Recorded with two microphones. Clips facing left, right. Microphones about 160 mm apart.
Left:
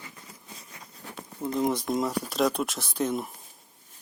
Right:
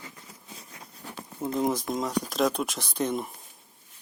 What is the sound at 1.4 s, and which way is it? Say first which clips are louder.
Speech: even; centre (ahead or behind).